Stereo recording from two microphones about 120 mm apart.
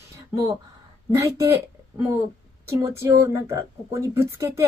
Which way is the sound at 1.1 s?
25° right (ahead or behind).